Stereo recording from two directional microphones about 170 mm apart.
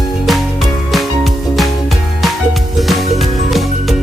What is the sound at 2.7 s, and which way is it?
Music, centre (ahead or behind).